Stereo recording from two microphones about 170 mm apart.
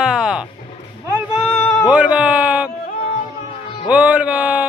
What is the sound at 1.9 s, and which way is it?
Music, 10° right (ahead or behind).